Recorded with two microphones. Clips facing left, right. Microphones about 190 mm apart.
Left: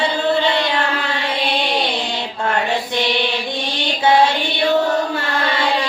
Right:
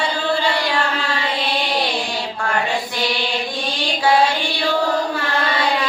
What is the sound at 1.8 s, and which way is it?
Mantra, 20° left (ahead or behind).